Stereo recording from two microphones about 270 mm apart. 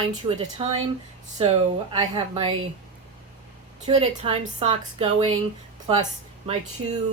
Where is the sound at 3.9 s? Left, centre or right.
Right.